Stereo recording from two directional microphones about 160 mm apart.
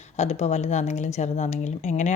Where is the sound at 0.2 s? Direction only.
45° left (ahead or behind).